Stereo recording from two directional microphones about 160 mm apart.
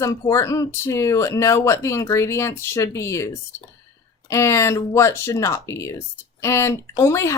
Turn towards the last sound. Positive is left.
turn(degrees=20)  # may be behind; listen again after turning